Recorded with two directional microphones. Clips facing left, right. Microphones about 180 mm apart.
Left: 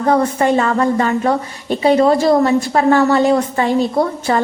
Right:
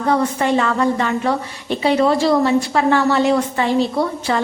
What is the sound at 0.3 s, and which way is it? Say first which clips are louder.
A woman's voice: left 3 dB; 40° left (ahead or behind).